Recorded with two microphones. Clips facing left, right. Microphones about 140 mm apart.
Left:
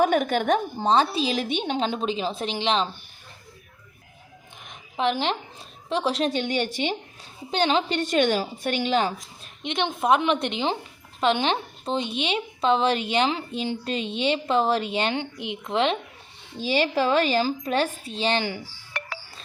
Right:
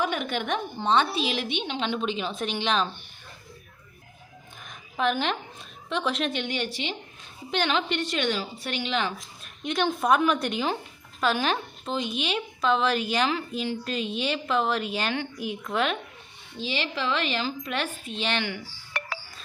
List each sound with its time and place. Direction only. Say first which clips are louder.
0.0 s a woman's voice: left 7 dB; 45° left (ahead or behind); by 2.9 s 30° left (ahead or behind)
4.6 s a woman's voice: left 1 dB; 25° left (ahead or behind); by 6.9 s 45° left (ahead or behind)
7.5 s a woman's voice: left 3 dB; 30° left (ahead or behind)
9.6 s a woman's voice: left 1 dB; 25° left (ahead or behind)
16.6 s a woman's voice: left 7 dB; 45° left (ahead or behind)